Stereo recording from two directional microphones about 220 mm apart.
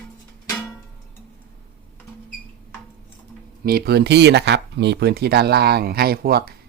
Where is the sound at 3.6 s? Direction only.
45° right (ahead or behind).